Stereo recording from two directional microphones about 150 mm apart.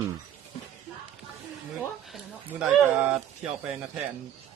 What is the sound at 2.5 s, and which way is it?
Speech, 5° right (ahead or behind).